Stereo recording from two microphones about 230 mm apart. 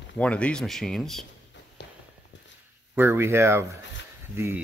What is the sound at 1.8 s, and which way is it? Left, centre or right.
Walk, left.